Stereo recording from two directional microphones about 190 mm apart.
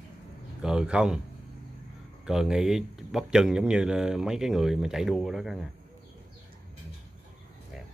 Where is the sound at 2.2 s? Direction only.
5° right (ahead or behind).